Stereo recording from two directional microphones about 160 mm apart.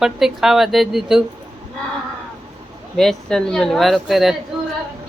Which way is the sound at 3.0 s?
5° left (ahead or behind).